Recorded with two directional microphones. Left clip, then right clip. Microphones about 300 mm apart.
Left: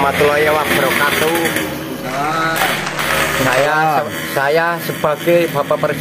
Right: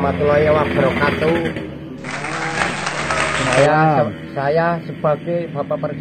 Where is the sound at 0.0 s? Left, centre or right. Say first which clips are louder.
Left 3 dB; left.